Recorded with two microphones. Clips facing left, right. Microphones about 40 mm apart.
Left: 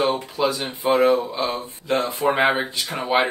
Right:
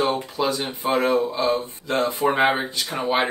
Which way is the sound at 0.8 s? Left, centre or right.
Centre.